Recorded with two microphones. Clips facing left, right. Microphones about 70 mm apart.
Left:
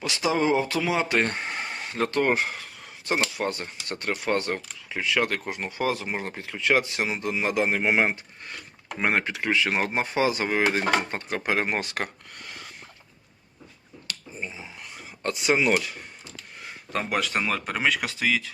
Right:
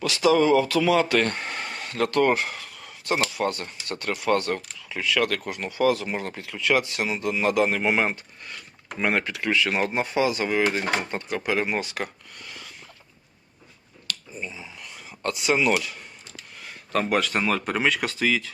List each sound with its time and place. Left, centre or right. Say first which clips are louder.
0.0 s speech: right 5 dB; left
14.1 s speech: right 1 dB; left
16.9 s speech: right 3 dB; centre